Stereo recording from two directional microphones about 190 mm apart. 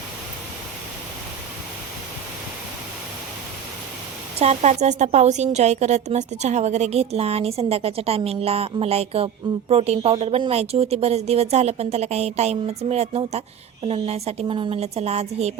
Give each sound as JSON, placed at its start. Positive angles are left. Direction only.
{"t": 4.4, "sound": "a woman's voice", "side_deg": -35}